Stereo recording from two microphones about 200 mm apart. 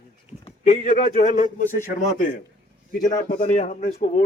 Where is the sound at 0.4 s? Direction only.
40° left (ahead or behind).